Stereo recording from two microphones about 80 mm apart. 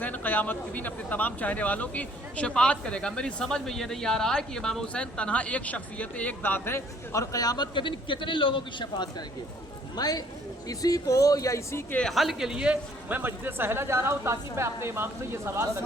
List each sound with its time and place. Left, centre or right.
0.0 s speech: left
9.9 s speech: left
12.0 s a man's voice: centre; by 15.7 s right